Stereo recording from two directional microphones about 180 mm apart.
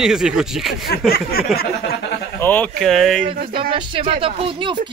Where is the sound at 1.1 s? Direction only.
60° left (ahead or behind).